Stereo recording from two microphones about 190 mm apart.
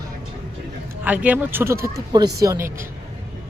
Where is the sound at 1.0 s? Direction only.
10° right (ahead or behind).